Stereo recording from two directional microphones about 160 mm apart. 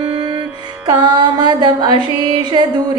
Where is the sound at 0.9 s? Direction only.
25° right (ahead or behind).